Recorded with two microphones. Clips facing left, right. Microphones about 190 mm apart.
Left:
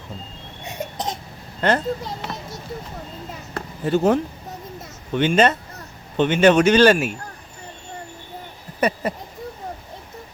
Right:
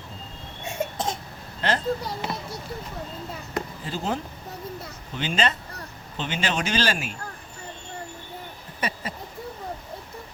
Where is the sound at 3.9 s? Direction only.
65° left (ahead or behind).